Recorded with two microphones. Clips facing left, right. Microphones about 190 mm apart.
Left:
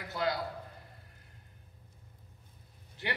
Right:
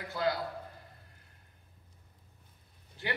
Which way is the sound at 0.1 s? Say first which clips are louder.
Right 1 dB; 20° left (ahead or behind).